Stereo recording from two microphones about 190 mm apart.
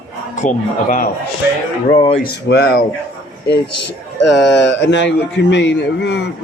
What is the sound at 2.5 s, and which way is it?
Speech, 65° left (ahead or behind).